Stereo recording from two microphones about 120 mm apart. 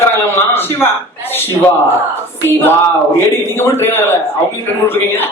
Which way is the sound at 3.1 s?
20° left (ahead or behind).